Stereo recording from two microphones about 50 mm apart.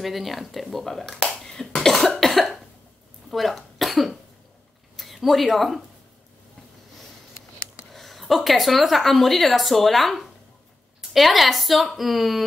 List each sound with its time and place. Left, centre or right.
0.0 s speech: centre
1.3 s cough: centre
4.9 s a woman's voice: centre
7.9 s speech: centre